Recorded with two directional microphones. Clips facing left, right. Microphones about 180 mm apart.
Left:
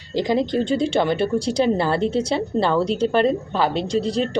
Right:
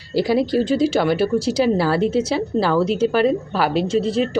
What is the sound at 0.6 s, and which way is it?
Speech, 5° right (ahead or behind).